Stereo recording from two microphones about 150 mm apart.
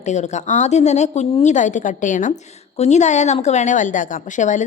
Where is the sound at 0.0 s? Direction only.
50° left (ahead or behind).